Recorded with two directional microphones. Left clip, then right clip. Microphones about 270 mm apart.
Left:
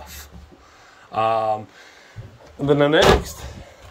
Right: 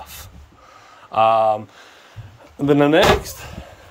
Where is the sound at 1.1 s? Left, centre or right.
Centre.